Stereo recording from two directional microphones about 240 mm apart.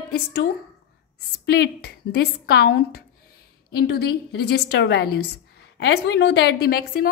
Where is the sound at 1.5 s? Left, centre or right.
Left.